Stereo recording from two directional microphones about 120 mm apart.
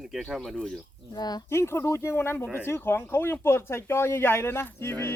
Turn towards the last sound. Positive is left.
turn(degrees=20)  # may be behind; listen again after turning